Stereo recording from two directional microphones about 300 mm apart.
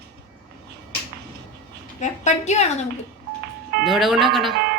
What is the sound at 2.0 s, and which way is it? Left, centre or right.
Speech, left.